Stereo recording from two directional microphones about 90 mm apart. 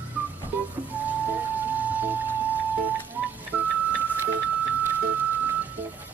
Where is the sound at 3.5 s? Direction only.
20° right (ahead or behind).